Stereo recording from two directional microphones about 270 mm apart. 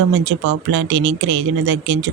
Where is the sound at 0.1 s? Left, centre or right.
Right.